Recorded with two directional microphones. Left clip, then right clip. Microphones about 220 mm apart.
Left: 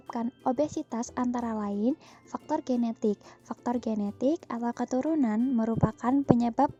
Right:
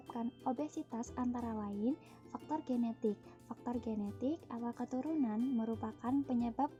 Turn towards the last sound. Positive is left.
turn(degrees=45)  # may be behind; listen again after turning